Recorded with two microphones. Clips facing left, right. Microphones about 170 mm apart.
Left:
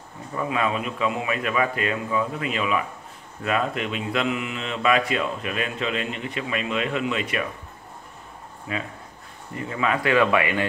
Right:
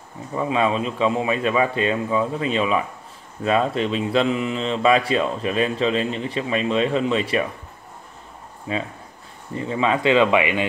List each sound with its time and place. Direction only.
0.3 s a man's voice: 25° right (ahead or behind)
8.7 s a man's voice: 25° right (ahead or behind)